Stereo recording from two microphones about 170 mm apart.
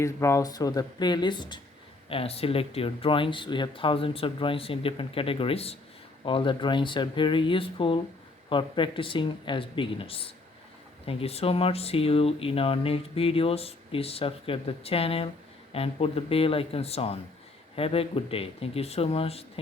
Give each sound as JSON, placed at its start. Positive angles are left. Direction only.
{"t": 0.0, "sound": "speech", "side_deg": 15}